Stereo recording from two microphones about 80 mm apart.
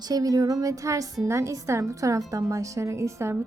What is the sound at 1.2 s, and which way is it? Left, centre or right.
A woman's voice, right.